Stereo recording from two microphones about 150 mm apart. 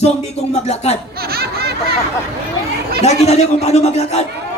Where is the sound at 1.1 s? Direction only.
90° right.